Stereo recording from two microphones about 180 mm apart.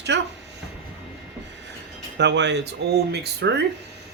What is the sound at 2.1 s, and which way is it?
Speech, 75° right (ahead or behind).